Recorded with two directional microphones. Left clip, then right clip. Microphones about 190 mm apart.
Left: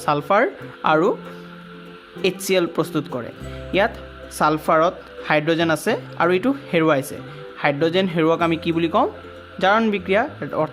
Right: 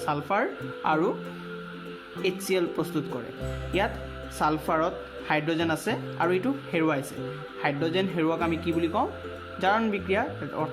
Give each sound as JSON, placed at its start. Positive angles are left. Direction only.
{"t": 0.0, "sound": "speech", "side_deg": 45}
{"t": 2.2, "sound": "speech", "side_deg": 45}